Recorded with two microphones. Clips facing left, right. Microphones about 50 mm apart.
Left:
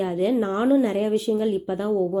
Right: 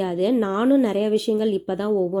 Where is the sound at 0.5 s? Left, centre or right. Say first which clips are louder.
Right 1 dB; right.